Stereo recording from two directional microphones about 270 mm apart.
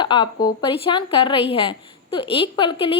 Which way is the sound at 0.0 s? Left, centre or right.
Centre.